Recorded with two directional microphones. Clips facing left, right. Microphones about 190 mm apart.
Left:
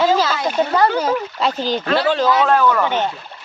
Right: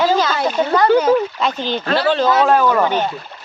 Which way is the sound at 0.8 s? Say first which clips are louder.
Right 5 dB; 30° left (ahead or behind).